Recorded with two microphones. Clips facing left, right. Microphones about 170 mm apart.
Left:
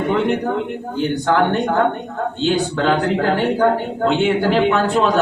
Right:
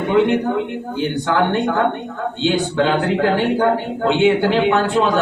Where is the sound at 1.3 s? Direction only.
40° left (ahead or behind).